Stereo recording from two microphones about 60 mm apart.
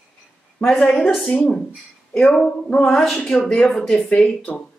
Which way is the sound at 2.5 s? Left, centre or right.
Centre.